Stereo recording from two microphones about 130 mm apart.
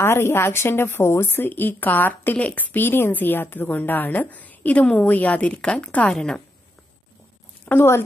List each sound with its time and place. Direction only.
0.0 s a woman's voice: 20° left (ahead or behind)
7.6 s a woman's voice: 20° left (ahead or behind)